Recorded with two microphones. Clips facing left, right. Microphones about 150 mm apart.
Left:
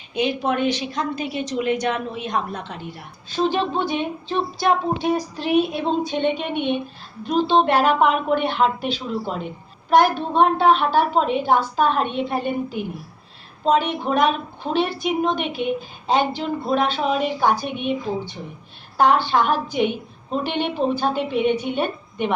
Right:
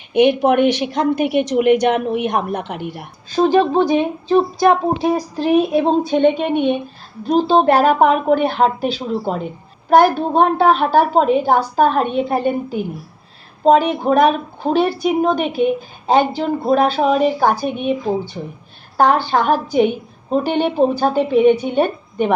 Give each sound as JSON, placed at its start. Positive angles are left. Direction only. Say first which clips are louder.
{"t": 0.1, "sound": "a woman's voice", "louder": "right 9 dB", "side_deg": -65}
{"t": 3.3, "sound": "a woman's voice", "louder": "right 8 dB", "side_deg": -45}
{"t": 18.9, "sound": "a woman's voice", "louder": "right 3 dB", "side_deg": -45}